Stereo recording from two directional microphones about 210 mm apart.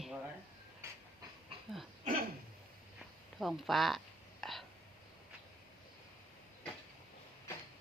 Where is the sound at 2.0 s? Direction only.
40° right (ahead or behind).